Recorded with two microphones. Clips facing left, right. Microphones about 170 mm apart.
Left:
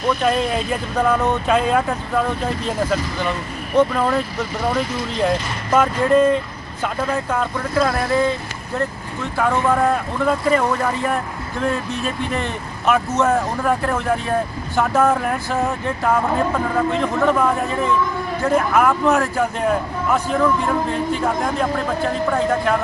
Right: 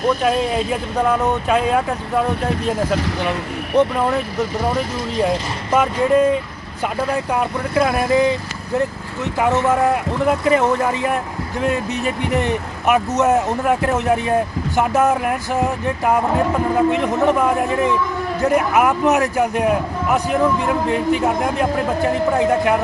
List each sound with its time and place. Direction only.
0.2 s speech: 5° right (ahead or behind)
3.8 s speech: 15° right (ahead or behind)
5.2 s speech: 10° right (ahead or behind)